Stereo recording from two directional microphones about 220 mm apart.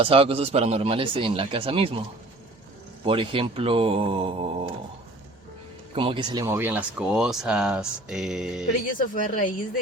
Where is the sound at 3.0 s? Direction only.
25° right (ahead or behind).